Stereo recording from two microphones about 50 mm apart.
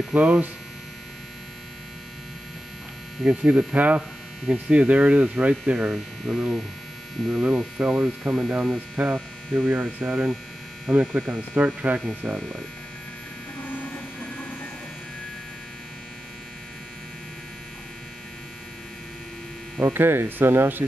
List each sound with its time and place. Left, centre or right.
0.1 s hum: right
3.3 s hum: right
3.7 s speech: right
4.6 s hum: right
6.2 s speech: centre
7.3 s speech: right
7.8 s speech: right
10.9 s hum: right
11.5 s speech: right
13.7 s a sound: left
19.8 s speech: right